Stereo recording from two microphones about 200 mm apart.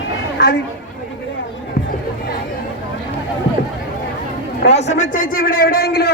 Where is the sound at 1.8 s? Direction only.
60° left (ahead or behind).